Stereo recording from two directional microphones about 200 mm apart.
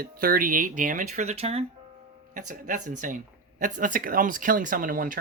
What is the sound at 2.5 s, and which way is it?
Speech, 40° right (ahead or behind).